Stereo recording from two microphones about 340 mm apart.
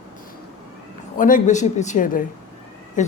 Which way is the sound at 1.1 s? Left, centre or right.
Left.